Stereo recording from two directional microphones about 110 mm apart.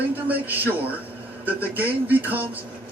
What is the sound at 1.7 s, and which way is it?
Speech, 15° right (ahead or behind).